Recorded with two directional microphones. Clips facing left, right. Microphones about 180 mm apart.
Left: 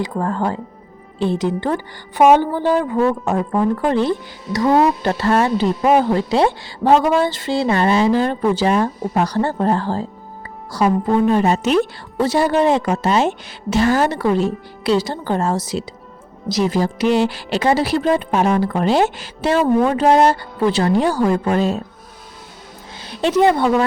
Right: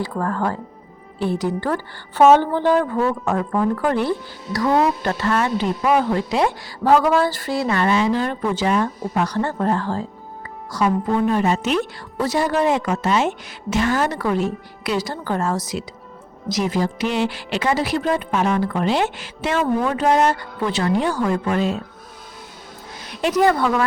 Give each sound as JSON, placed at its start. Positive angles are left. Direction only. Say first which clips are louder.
{"t": 0.0, "sound": "a woman's voice", "louder": "left 2 dB", "side_deg": 20}
{"t": 3.0, "sound": "a woman's voice", "louder": "left 3 dB", "side_deg": 25}
{"t": 12.1, "sound": "a woman's voice", "louder": "left 4 dB", "side_deg": 30}
{"t": 23.0, "sound": "a woman's voice", "louder": "left 3 dB", "side_deg": 30}